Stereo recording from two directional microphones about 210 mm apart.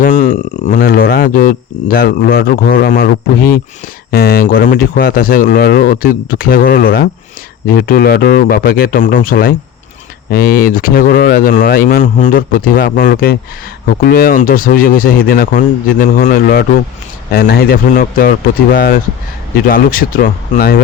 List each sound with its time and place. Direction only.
0.0 s speech: 35° left (ahead or behind)